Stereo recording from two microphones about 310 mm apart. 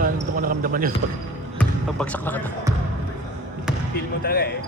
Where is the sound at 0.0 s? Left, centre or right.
Right.